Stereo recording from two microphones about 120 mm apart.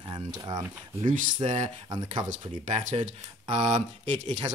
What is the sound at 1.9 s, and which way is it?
Speech, 35° right (ahead or behind).